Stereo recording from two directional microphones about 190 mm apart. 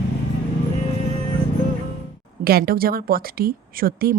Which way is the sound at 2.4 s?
55° right (ahead or behind).